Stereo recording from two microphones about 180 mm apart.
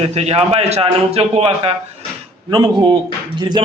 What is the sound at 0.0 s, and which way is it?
A man's voice, 35° right (ahead or behind).